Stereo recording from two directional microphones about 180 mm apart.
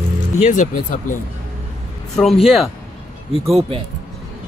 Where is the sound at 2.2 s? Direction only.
Centre (ahead or behind).